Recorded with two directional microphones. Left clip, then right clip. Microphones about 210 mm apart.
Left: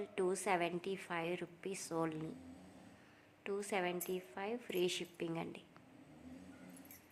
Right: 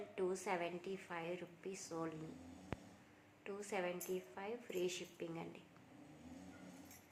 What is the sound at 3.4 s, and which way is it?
A woman's voice, 40° left (ahead or behind).